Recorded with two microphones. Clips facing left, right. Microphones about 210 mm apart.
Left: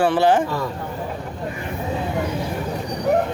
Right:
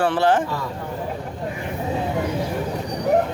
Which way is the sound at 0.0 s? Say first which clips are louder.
Left 2 dB; 10° left (ahead or behind).